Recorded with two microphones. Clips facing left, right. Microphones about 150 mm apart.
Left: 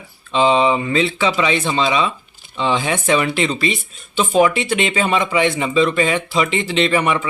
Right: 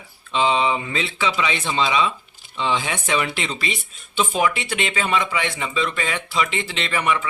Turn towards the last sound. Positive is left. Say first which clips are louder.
# left 6 dB
turn(degrees=25)  # may be behind; listen again after turning